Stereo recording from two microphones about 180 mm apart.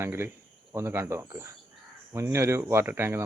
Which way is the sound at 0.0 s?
15° right (ahead or behind).